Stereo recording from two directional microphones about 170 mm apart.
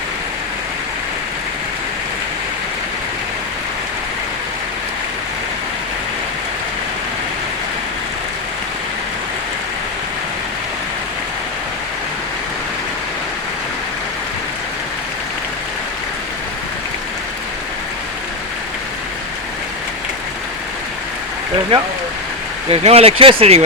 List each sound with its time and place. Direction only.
22.7 s speech: 35° right (ahead or behind)